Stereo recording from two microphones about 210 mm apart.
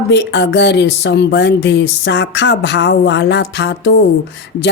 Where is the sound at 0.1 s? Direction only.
55° left (ahead or behind).